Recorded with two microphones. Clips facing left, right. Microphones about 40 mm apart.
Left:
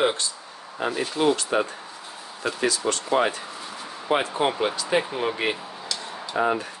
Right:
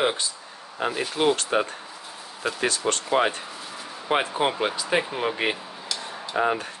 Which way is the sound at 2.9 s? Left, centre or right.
Right.